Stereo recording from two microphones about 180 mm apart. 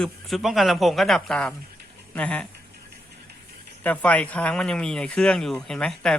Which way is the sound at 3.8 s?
10° left (ahead or behind).